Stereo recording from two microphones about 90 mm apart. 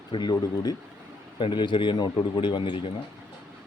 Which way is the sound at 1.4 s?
65° left (ahead or behind).